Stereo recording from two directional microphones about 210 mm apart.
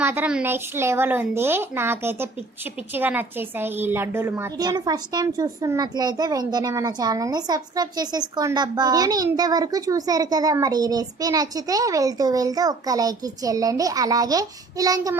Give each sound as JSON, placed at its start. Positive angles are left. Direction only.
{"t": 0.0, "sound": "a woman's voice", "side_deg": -10}